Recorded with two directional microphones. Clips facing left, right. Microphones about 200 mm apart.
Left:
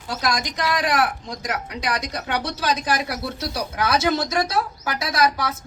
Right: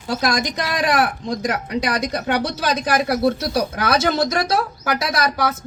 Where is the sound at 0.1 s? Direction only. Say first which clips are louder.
Right 4 dB; 55° right (ahead or behind).